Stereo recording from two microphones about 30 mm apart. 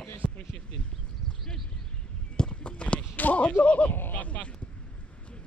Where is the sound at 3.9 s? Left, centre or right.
Left.